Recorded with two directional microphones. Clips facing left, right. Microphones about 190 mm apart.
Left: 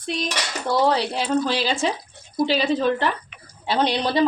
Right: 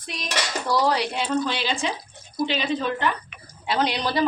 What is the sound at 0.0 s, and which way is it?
Speech, 30° left (ahead or behind).